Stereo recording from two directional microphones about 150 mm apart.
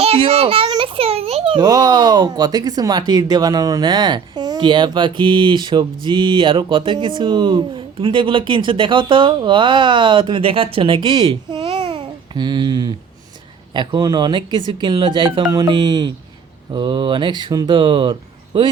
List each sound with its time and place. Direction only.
0.0 s a child's voice: 40° right (ahead or behind)